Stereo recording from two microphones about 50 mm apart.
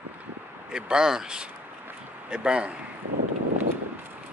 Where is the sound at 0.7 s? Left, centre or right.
Centre.